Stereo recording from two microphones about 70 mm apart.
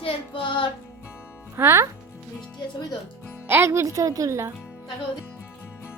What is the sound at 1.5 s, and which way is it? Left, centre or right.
Speech, right.